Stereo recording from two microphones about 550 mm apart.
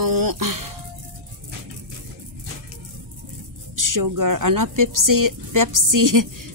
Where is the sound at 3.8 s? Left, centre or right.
Right.